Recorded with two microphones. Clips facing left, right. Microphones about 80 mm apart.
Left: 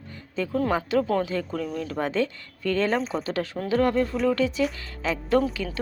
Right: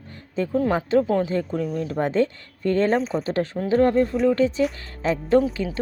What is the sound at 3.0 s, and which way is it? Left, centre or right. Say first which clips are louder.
Speech: right 3 dB; centre.